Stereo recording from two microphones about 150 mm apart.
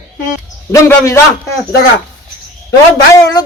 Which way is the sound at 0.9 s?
20° left (ahead or behind).